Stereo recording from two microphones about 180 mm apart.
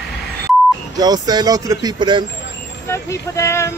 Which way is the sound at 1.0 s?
20° right (ahead or behind).